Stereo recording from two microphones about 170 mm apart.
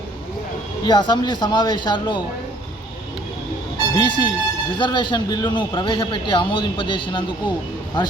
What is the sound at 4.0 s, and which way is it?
A man's voice, 25° left (ahead or behind).